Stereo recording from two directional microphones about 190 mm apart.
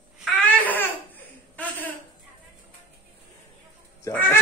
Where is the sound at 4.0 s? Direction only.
10° left (ahead or behind).